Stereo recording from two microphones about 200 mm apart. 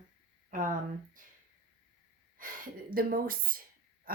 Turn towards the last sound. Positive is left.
turn(degrees=-45)  # may be behind; listen again after turning